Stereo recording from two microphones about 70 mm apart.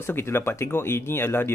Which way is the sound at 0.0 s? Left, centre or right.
Left.